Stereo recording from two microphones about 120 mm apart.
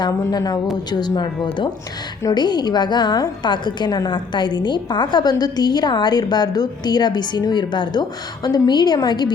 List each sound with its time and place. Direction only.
0.0 s a woman's voice: 30° left (ahead or behind)